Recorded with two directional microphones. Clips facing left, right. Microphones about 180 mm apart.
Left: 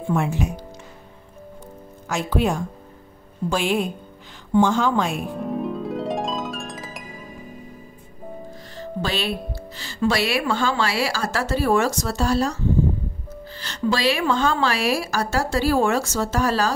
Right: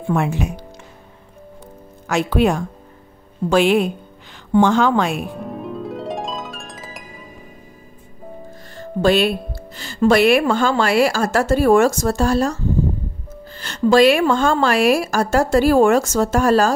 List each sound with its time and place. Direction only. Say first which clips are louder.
0.1 s a woman's voice: right 3 dB; 70° right (ahead or behind)
2.0 s a woman's voice: right 5 dB; 70° right (ahead or behind)
5.3 s harp: left 2 dB; centre (ahead or behind)
8.7 s music: right 10 dB; 50° right (ahead or behind)
9.8 s a woman's voice: right 8 dB; 50° right (ahead or behind)
13.6 s a woman's voice: right 10 dB; 50° right (ahead or behind)